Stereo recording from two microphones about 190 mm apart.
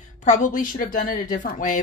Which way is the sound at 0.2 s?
40° left (ahead or behind).